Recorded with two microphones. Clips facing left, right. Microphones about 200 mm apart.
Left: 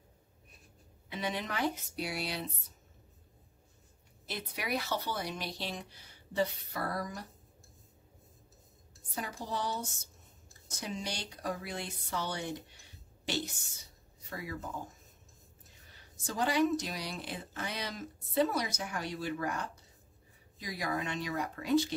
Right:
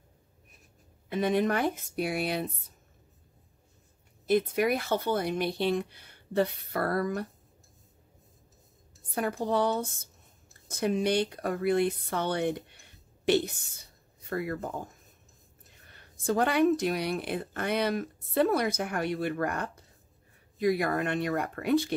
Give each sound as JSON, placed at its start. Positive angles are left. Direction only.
{"t": 1.0, "sound": "speech", "side_deg": -50}
{"t": 4.3, "sound": "speech", "side_deg": -50}
{"t": 9.1, "sound": "speech", "side_deg": -55}
{"t": 15.9, "sound": "speech", "side_deg": -60}